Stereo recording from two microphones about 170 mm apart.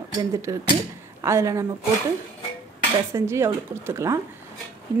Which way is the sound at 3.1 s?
15° right (ahead or behind).